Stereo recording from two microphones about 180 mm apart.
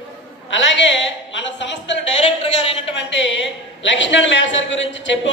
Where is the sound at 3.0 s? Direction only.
85° left.